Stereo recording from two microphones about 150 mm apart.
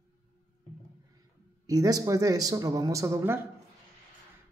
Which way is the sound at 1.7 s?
25° right (ahead or behind).